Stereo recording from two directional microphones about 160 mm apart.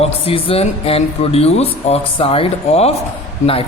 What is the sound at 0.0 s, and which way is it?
A man's voice, 35° left (ahead or behind).